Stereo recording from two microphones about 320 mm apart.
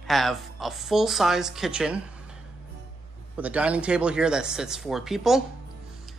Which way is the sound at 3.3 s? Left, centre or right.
Centre.